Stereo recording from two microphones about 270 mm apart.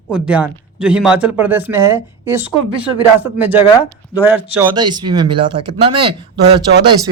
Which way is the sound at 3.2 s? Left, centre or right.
Centre.